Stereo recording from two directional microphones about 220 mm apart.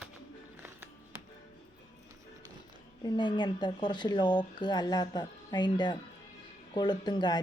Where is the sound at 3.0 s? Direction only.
20° left (ahead or behind).